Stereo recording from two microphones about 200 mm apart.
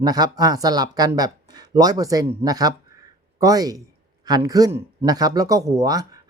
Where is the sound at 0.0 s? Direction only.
20° right (ahead or behind).